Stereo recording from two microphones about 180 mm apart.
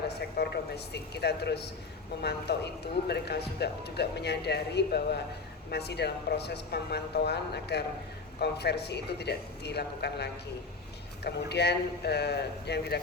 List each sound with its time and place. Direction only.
0.1 s speech: 65° left (ahead or behind)
3.1 s speech: 65° left (ahead or behind)